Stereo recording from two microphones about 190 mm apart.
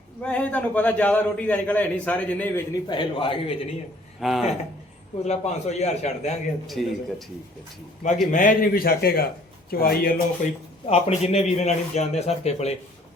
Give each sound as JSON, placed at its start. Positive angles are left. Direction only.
{"t": 0.2, "sound": "a man's voice", "side_deg": 10}
{"t": 4.2, "sound": "speech", "side_deg": 0}
{"t": 5.2, "sound": "speech", "side_deg": 35}
{"t": 6.7, "sound": "speech", "side_deg": 0}
{"t": 8.3, "sound": "a man's voice", "side_deg": 45}
{"t": 10.8, "sound": "speech", "side_deg": 35}